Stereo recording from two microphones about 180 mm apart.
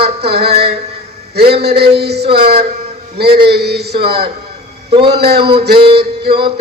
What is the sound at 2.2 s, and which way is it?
Speech, 30° right (ahead or behind).